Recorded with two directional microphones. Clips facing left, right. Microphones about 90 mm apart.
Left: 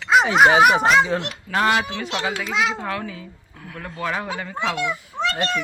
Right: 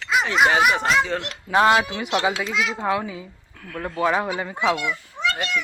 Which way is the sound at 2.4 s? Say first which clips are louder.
Left 3 dB; 30° left (ahead or behind).